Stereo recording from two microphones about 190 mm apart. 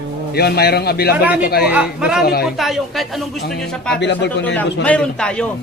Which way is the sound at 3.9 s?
65° left (ahead or behind).